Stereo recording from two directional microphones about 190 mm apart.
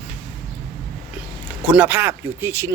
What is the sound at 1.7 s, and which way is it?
Speech, 10° right (ahead or behind).